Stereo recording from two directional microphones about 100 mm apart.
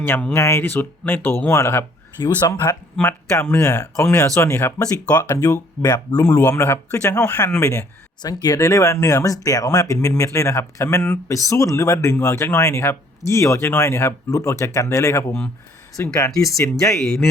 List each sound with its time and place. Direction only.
0.0 s speech: 20° left (ahead or behind); by 2.7 s 35° left (ahead or behind)
3.0 s speech: 25° left (ahead or behind)
3.6 s speech: 35° left (ahead or behind)
8.2 s speech: 40° left (ahead or behind)
16.8 s speech: 5° left (ahead or behind)